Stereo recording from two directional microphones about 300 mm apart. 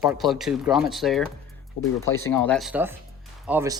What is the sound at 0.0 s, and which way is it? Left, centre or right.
Speech, centre.